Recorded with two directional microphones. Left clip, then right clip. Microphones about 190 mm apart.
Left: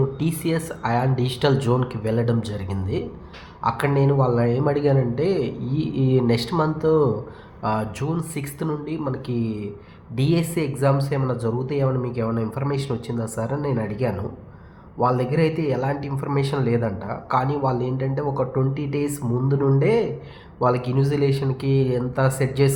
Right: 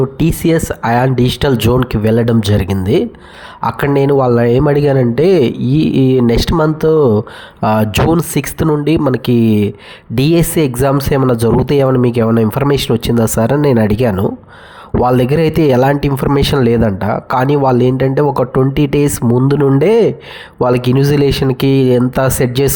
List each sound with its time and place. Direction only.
0.2 s speech: 50° right (ahead or behind)